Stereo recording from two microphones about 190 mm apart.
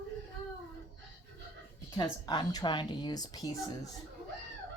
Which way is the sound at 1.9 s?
20° left (ahead or behind).